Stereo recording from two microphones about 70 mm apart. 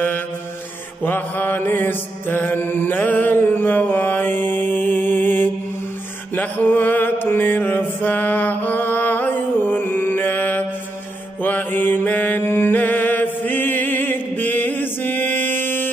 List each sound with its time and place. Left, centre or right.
1.0 s mantra: left